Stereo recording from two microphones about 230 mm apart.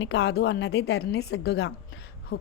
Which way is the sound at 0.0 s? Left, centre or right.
Left.